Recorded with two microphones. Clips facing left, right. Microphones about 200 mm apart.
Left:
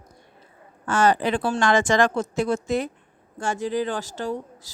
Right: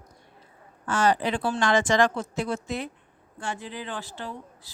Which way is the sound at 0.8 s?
50° left (ahead or behind).